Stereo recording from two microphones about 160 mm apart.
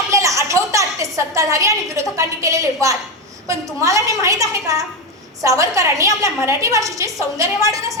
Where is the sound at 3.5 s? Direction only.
20° right (ahead or behind).